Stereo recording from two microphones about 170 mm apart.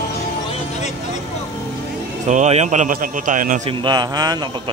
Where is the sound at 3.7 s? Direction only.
25° right (ahead or behind).